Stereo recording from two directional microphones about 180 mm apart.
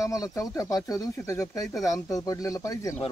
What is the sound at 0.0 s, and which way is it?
Speech, 20° left (ahead or behind).